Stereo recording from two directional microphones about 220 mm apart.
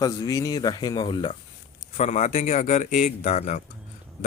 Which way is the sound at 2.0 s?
30° left (ahead or behind).